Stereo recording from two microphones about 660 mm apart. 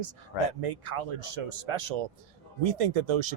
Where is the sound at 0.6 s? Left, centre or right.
Right.